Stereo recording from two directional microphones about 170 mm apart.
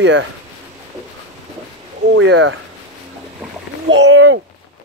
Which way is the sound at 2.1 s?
90° right.